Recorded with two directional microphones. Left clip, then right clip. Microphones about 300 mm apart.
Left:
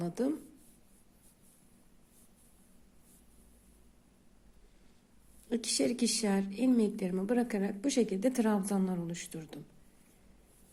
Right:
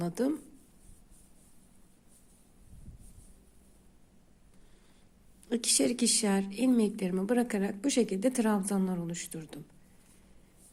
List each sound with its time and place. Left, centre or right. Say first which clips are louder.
0.0 s a woman's voice: right 2 dB; centre
5.5 s a woman's voice: right 3 dB; centre